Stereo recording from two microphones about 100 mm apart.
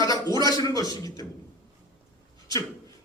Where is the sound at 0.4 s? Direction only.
40° left (ahead or behind).